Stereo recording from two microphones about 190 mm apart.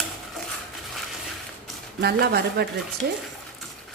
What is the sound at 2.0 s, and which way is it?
Speech, 55° right (ahead or behind).